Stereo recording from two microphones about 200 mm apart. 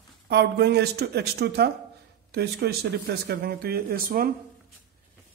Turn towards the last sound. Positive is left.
turn(degrees=-45)  # may be behind; listen again after turning